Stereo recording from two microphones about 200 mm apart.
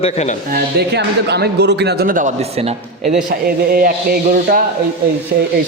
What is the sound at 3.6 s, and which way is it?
A man's voice, 45° right (ahead or behind).